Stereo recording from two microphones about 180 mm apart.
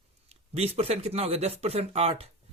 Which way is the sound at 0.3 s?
35° right (ahead or behind).